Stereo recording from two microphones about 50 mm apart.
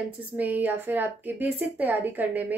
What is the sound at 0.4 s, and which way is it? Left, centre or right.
A woman's voice, right.